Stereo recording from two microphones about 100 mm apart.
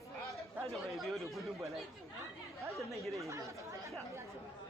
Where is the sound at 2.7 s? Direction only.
Centre (ahead or behind).